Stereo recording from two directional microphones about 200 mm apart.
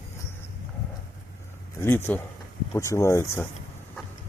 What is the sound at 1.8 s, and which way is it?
Speech, 10° left (ahead or behind).